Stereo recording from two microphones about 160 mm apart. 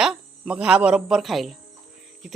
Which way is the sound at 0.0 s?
5° right (ahead or behind).